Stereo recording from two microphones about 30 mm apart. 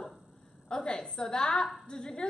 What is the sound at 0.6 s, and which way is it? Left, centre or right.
A woman's voice, left.